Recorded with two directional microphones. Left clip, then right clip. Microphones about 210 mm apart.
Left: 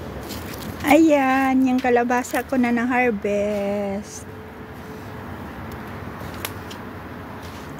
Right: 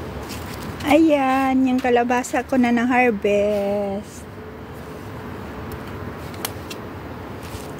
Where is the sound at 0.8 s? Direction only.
15° left (ahead or behind); by 3.5 s 10° right (ahead or behind).